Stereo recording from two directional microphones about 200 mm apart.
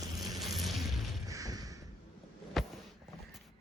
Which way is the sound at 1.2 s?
15° right (ahead or behind).